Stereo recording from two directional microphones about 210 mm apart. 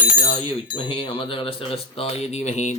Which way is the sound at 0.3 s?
25° left (ahead or behind).